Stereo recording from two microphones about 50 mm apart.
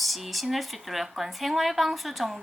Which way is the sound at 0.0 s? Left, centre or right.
Centre.